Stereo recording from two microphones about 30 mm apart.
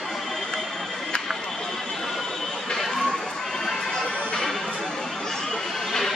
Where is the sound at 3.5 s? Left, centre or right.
Centre.